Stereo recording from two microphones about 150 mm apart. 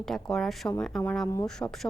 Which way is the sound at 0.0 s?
Centre (ahead or behind).